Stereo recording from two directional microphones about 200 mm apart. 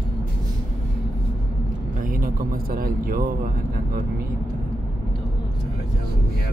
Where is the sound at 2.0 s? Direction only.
45° right (ahead or behind).